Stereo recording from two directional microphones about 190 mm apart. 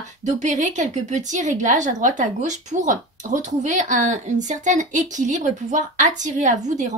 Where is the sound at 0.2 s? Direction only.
40° right (ahead or behind).